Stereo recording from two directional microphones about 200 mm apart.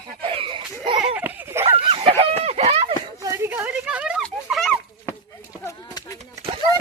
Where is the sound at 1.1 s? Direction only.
10° right (ahead or behind).